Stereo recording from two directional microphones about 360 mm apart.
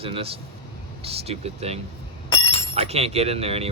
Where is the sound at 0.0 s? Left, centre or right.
Centre.